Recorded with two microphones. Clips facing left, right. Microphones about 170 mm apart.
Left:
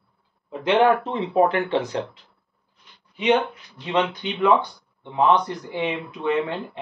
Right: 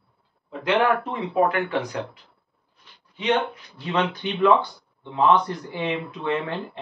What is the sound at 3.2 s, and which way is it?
Speech, 15° left (ahead or behind).